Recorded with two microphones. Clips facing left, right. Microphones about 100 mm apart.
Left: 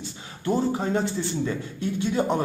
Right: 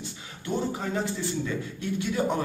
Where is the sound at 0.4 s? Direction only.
35° left (ahead or behind).